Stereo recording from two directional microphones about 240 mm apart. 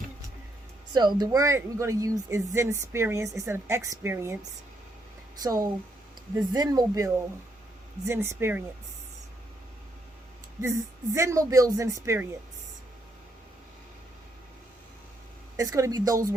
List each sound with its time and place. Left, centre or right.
0.9 s speech: centre
5.4 s speech: centre
10.6 s speech: centre
15.5 s speech: centre